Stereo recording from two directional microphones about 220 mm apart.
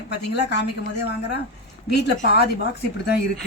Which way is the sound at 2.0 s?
50° left (ahead or behind).